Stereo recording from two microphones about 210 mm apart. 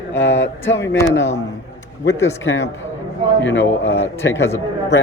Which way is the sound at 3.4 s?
60° left (ahead or behind).